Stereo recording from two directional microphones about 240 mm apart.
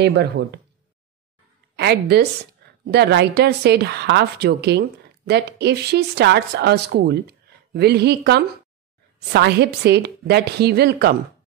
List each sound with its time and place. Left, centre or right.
0.0 s a woman's voice: right
1.8 s a woman's voice: right